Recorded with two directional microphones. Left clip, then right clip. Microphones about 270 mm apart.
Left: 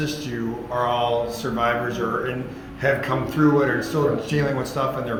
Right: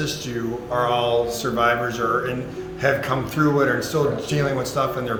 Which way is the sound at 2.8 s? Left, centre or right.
Right.